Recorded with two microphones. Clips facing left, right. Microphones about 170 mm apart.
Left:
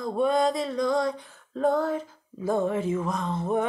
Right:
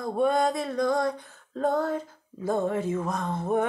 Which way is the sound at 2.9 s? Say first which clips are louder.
Left 1 dB; 50° right (ahead or behind).